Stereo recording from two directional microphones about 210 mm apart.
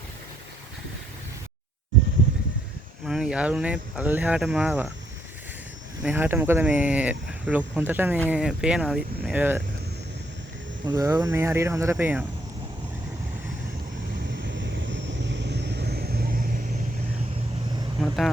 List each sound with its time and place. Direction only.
3.1 s speech: 5° right (ahead or behind)
6.0 s speech: 5° right (ahead or behind)
10.8 s speech: 15° right (ahead or behind)
14.3 s vehicle: 60° right (ahead or behind); by 16.6 s 45° right (ahead or behind)